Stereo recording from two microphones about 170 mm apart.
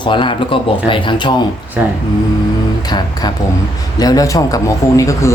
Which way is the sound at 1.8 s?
10° right (ahead or behind).